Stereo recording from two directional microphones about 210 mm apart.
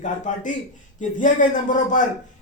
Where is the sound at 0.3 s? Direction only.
35° left (ahead or behind).